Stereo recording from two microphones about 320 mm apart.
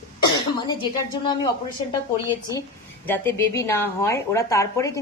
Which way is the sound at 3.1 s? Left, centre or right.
Centre.